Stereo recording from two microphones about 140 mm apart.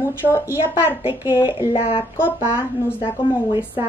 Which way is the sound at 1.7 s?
45° left (ahead or behind).